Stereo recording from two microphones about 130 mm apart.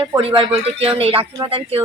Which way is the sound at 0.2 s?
45° right (ahead or behind).